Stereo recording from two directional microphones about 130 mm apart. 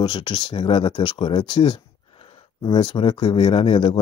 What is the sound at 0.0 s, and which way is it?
Speech, 35° left (ahead or behind).